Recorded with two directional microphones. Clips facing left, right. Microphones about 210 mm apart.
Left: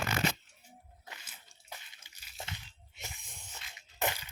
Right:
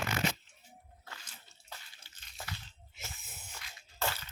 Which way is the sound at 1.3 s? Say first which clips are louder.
Left 1 dB; 15° left (ahead or behind).